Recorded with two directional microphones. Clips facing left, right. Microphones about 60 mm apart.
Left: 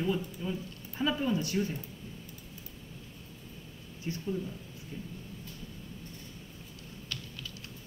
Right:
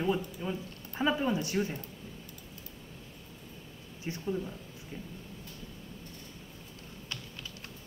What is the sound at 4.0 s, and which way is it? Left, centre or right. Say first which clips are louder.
Speech: even; right.